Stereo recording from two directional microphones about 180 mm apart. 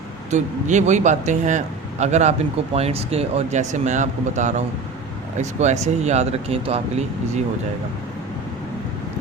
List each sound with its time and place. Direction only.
0.3 s speech: 40° right (ahead or behind)